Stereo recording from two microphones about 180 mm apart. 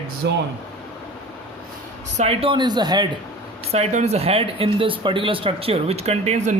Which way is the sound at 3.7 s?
40° right (ahead or behind).